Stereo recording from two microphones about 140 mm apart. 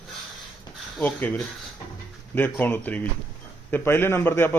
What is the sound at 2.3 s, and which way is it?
A man's voice, 15° left (ahead or behind).